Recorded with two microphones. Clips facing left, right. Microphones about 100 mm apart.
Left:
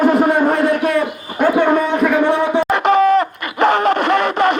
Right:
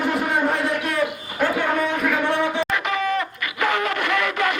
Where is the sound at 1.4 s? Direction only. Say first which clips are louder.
Left 8 dB; 30° left (ahead or behind).